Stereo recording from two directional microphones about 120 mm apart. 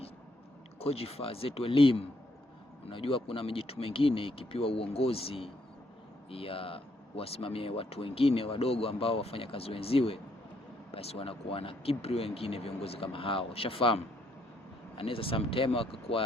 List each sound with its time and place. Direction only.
0.8 s speech: 55° left (ahead or behind)